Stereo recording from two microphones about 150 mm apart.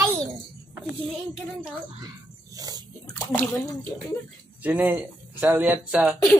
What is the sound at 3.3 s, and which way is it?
Speech, 15° left (ahead or behind).